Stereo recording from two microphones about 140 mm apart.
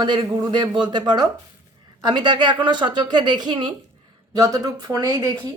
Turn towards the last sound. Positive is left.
turn(degrees=-25)  # may be behind; listen again after turning